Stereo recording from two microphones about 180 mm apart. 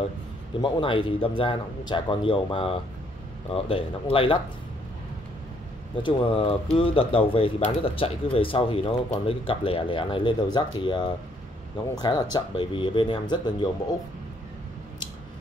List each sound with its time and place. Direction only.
0.6 s a man's voice: 25° left (ahead or behind)
6.0 s a man's voice: 30° left (ahead or behind)